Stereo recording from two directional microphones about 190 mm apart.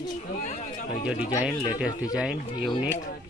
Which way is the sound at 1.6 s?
5° right (ahead or behind).